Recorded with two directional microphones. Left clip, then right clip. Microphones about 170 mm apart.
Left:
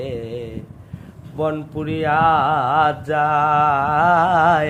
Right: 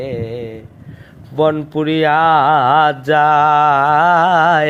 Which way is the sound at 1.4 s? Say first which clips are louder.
Right 8 dB; 40° right (ahead or behind).